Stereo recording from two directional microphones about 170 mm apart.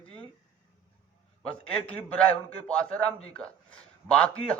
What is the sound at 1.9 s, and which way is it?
A man's voice, 10° left (ahead or behind).